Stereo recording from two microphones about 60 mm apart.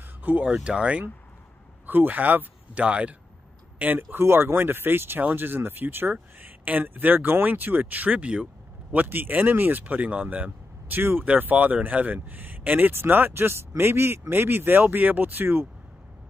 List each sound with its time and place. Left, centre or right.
0.2 s speech: right
3.8 s speech: right
8.9 s speech: right